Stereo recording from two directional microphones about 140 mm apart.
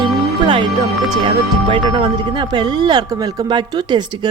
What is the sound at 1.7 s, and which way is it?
Speech, 35° right (ahead or behind).